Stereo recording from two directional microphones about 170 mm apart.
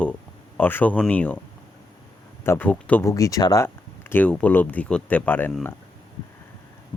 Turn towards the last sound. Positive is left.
turn(degrees=10)  # may be behind; listen again after turning